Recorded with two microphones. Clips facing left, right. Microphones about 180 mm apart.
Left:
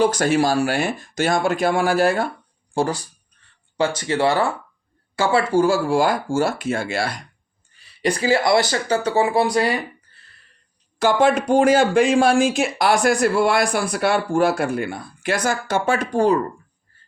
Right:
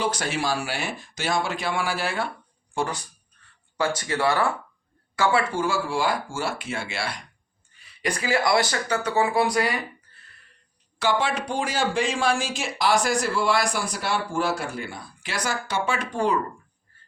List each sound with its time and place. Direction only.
0.0 s speech: 45° left (ahead or behind)
8.0 s speech: 30° left (ahead or behind)
11.0 s speech: 45° left (ahead or behind)